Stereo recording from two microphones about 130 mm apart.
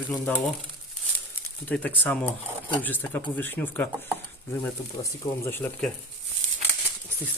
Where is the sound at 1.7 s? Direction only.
10° left (ahead or behind).